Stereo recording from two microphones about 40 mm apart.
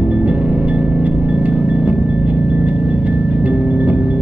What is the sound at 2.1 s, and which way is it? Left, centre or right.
Music, right.